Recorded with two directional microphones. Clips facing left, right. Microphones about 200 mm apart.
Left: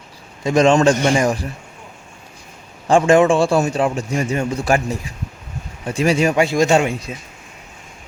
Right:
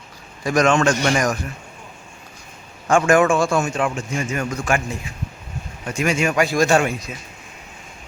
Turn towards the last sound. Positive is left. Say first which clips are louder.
# left 2 dB
turn(degrees=25)  # may be behind; listen again after turning